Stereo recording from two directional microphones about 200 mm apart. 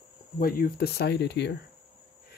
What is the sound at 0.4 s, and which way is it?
Speech, 45° left (ahead or behind).